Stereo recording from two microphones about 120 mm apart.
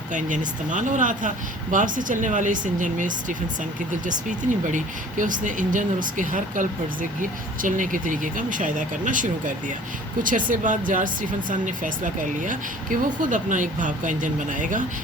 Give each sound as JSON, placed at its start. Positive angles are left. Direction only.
{"t": 0.1, "sound": "speech", "side_deg": -90}